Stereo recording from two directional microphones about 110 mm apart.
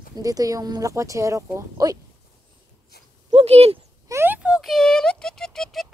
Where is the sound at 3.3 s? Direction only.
65° right (ahead or behind).